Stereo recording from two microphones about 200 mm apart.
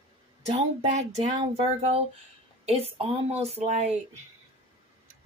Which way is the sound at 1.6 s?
30° right (ahead or behind).